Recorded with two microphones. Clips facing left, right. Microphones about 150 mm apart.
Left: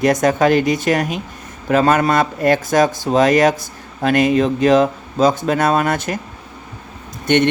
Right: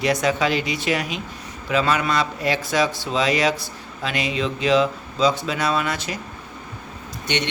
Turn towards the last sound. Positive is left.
turn(degrees=50)  # may be behind; listen again after turning